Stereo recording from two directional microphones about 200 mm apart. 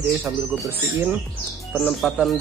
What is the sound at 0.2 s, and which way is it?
Speech, 10° right (ahead or behind).